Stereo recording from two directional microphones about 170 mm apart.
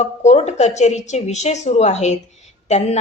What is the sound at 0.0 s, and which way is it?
A woman's voice, 40° left (ahead or behind).